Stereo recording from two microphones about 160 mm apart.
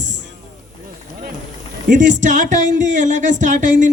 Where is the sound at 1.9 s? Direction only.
50° right (ahead or behind).